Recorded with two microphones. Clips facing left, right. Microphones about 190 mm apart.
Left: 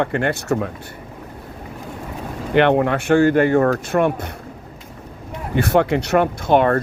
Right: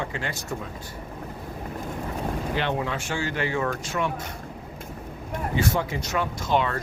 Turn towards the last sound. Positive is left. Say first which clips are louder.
# left 9 dB
turn(degrees=55)  # may be behind; listen again after turning